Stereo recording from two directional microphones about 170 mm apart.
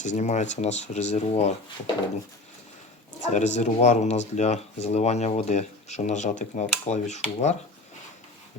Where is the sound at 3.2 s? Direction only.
45° left (ahead or behind).